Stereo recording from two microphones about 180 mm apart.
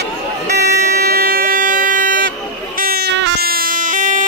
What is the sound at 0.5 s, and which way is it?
Vehicle, 65° right (ahead or behind).